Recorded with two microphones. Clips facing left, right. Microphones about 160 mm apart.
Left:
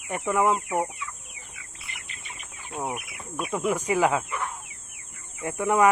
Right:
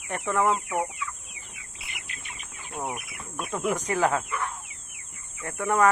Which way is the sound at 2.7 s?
5° left (ahead or behind).